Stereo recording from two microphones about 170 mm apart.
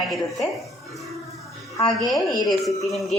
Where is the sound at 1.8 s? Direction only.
30° left (ahead or behind).